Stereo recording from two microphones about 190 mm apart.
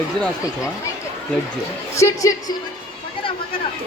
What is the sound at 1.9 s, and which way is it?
Speech, 15° left (ahead or behind).